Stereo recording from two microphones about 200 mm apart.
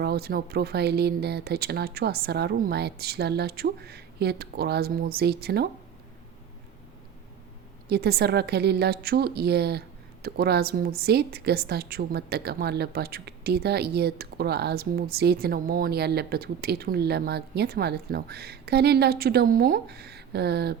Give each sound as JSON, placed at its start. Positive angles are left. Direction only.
{"t": 0.0, "sound": "a woman's voice", "side_deg": -50}
{"t": 7.9, "sound": "a woman's voice", "side_deg": -55}